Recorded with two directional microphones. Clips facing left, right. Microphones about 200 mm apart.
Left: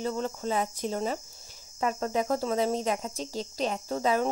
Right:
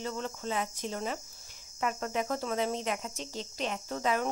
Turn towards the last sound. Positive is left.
turn(degrees=35)  # may be behind; listen again after turning